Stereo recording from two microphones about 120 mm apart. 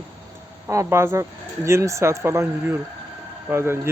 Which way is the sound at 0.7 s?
25° right (ahead or behind).